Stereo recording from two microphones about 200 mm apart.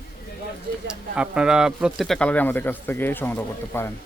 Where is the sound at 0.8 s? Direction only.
5° right (ahead or behind).